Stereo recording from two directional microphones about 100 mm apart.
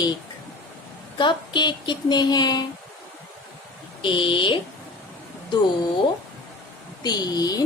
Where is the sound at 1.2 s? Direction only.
50° left (ahead or behind).